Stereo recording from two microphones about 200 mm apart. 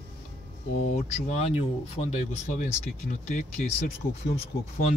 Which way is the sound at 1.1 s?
35° left (ahead or behind).